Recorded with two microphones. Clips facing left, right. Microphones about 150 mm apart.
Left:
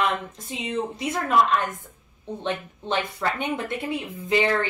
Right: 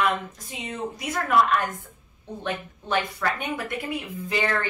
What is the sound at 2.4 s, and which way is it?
Speech, 25° left (ahead or behind).